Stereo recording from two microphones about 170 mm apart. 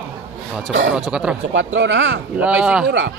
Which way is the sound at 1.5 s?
90° right.